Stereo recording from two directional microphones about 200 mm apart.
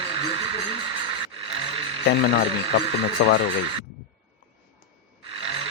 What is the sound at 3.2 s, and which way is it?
Speech, 40° left (ahead or behind).